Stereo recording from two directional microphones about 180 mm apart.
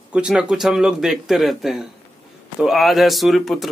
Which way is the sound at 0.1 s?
5° right (ahead or behind).